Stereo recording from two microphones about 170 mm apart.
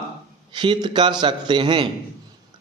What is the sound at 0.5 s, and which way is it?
A man's voice, 25° right (ahead or behind).